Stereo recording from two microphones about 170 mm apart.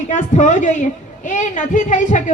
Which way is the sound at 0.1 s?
50° left (ahead or behind).